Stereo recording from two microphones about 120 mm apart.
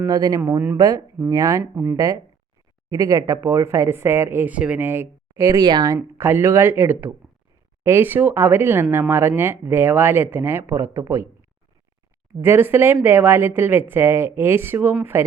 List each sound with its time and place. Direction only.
0.0 s speech: 30° right (ahead or behind)
0.5 s speech: 15° right (ahead or behind)
0.8 s speech: 30° right (ahead or behind)
1.7 s speech: 15° right (ahead or behind)
2.9 s speech: 30° right (ahead or behind)
6.1 s speech: 20° right (ahead or behind)
12.4 s speech: 20° right (ahead or behind)